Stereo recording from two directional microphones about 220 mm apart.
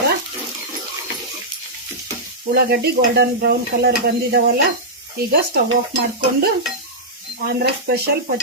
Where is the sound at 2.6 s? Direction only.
45° right (ahead or behind).